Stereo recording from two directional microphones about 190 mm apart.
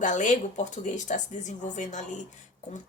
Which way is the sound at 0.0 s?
40° left (ahead or behind).